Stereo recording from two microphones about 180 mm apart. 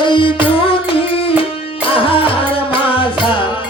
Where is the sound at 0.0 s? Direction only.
25° left (ahead or behind).